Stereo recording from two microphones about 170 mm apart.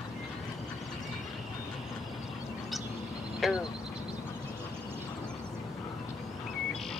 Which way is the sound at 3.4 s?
5° right (ahead or behind).